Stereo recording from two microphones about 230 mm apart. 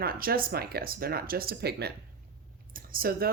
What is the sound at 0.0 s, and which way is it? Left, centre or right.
Speech, right.